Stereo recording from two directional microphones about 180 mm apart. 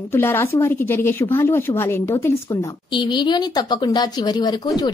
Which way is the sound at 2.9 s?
25° left (ahead or behind).